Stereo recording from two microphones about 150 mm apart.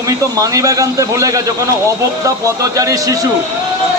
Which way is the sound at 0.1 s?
25° right (ahead or behind).